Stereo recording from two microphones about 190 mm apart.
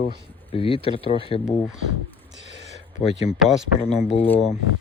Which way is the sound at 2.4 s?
65° right (ahead or behind).